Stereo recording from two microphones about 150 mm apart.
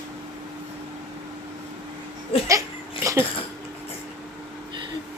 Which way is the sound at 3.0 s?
20° right (ahead or behind).